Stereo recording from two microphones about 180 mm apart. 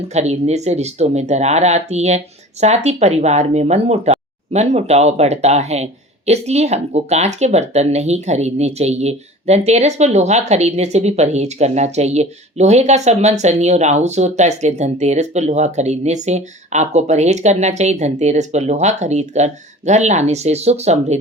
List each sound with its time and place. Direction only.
0.1 s speech: 35° right (ahead or behind)